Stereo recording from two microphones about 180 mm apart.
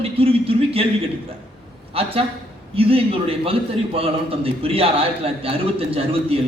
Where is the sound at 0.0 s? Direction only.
30° right (ahead or behind).